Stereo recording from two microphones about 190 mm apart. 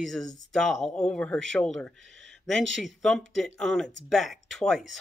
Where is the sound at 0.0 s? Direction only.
5° left (ahead or behind).